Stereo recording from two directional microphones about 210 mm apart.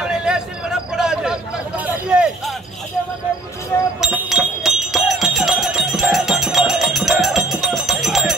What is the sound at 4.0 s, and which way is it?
Music, 5° right (ahead or behind).